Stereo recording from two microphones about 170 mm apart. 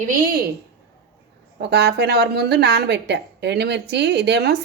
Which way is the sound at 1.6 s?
80° right.